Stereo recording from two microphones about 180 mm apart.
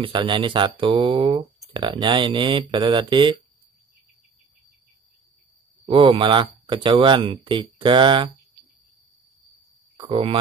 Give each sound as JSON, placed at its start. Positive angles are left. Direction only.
{"t": 0.0, "sound": "speech", "side_deg": -25}
{"t": 5.9, "sound": "speech", "side_deg": -30}
{"t": 9.9, "sound": "speech", "side_deg": -30}